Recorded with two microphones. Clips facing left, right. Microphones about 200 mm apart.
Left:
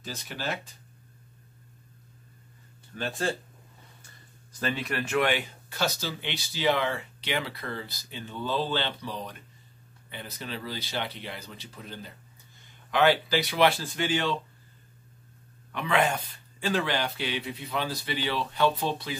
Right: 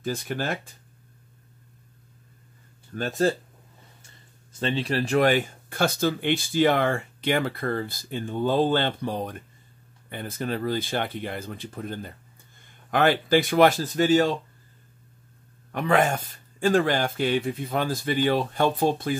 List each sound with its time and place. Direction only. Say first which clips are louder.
0.0 s speech: right 7 dB; 50° right (ahead or behind)
2.9 s speech: right 7 dB; 45° right (ahead or behind)
4.5 s speech: right 5 dB; 25° right (ahead or behind); by 14.3 s 45° right (ahead or behind)
15.7 s speech: right 4 dB; 45° right (ahead or behind)